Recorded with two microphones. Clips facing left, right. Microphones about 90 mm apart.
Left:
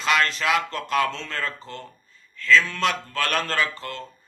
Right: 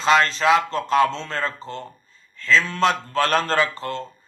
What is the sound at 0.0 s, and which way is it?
A man's voice, 30° right (ahead or behind).